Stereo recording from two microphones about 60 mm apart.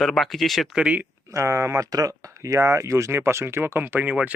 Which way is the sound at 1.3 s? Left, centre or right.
Right.